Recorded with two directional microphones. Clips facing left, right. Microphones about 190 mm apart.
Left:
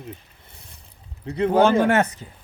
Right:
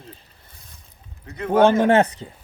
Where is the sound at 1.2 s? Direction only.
35° left (ahead or behind).